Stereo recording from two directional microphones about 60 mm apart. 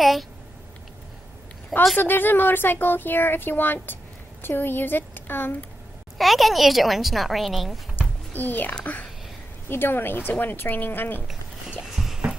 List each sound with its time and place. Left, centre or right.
0.0 s speech: centre
2.0 s speech: left
6.1 s speech: centre
8.3 s a child's voice: left
11.9 s a sound: centre